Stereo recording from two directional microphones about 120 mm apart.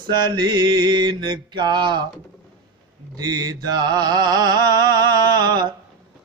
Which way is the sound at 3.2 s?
35° right (ahead or behind).